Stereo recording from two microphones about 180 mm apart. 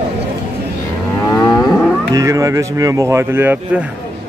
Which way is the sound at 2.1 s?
20° right (ahead or behind).